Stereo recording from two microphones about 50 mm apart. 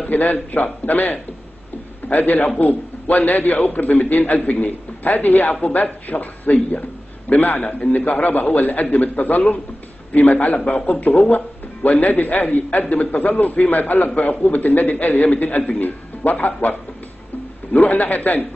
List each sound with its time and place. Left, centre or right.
0.0 s speech: left
17.7 s speech: left